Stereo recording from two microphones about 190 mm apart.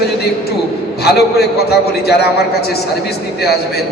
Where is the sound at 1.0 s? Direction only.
60° left (ahead or behind).